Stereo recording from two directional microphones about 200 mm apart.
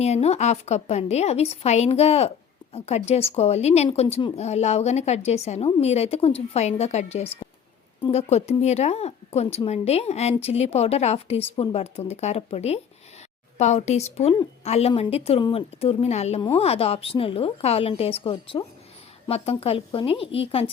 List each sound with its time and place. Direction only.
0.0 s a woman's voice: 30° left (ahead or behind)